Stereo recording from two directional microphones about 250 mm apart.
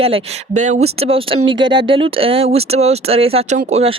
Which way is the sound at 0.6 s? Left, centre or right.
Right.